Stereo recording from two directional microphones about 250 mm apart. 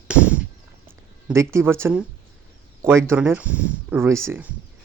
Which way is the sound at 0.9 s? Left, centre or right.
Centre.